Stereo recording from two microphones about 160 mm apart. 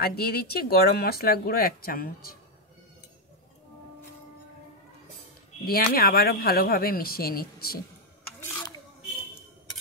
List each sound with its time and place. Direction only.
0.0 s speech: 75° left (ahead or behind)
5.7 s speech: 70° left (ahead or behind)